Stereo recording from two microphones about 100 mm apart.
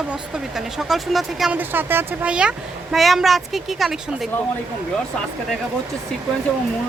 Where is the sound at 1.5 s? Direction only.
20° right (ahead or behind); by 4.0 s centre (ahead or behind).